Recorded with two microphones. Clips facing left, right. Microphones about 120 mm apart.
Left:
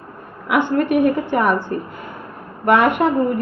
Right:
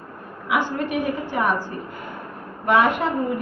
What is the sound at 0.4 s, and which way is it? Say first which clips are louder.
A woman's voice: left 6 dB; 60° left (ahead or behind).